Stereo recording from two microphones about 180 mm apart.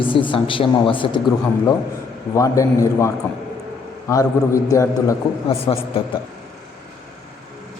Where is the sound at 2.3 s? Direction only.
15° left (ahead or behind).